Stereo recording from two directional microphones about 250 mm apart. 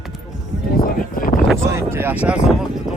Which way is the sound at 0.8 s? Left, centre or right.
Left.